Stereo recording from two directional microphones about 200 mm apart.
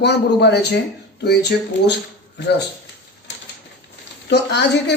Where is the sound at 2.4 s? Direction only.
55° left (ahead or behind).